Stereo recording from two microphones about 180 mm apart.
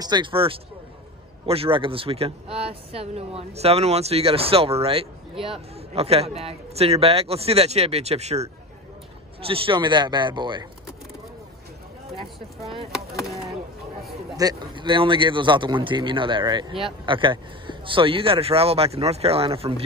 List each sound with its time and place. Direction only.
0.0 s a man's voice: 25° right (ahead or behind)
13.2 s chop: centre (ahead or behind)
14.3 s a man's voice: 20° right (ahead or behind)